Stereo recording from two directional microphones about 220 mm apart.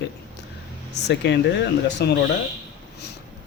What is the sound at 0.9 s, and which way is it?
Speech, 50° left (ahead or behind).